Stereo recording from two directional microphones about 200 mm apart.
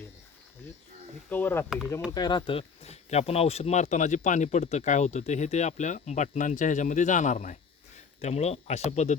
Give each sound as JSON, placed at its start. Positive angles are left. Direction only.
{"t": 1.3, "sound": "speech", "side_deg": 10}